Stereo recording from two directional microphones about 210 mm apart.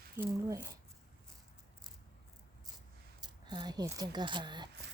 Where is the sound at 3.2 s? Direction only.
20° right (ahead or behind).